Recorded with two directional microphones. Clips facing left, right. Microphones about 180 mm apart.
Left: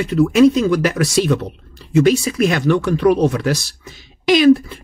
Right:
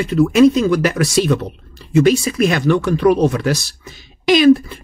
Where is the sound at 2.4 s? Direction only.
45° right (ahead or behind).